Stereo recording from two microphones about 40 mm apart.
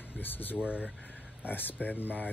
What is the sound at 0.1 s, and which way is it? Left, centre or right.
Speech, left.